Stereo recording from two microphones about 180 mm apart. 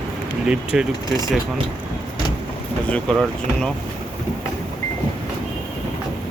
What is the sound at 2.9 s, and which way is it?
Speech, 5° left (ahead or behind).